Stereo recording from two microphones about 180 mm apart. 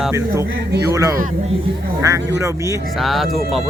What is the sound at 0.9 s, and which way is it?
Speech, 15° right (ahead or behind).